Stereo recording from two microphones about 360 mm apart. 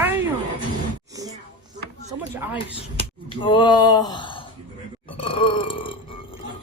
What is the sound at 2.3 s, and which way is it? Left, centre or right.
Speech, centre.